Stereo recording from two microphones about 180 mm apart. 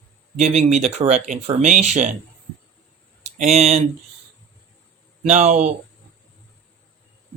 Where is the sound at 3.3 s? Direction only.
35° right (ahead or behind).